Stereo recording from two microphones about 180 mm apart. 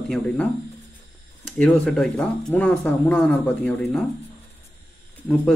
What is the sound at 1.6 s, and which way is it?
Speech, 5° left (ahead or behind).